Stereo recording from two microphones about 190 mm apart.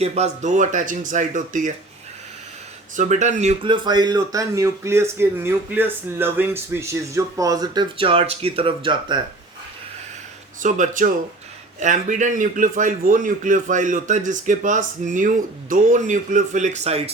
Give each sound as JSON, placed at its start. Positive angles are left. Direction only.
{"t": 0.0, "sound": "a man's voice", "side_deg": -35}
{"t": 2.9, "sound": "speech", "side_deg": -40}
{"t": 10.6, "sound": "a man's voice", "side_deg": -40}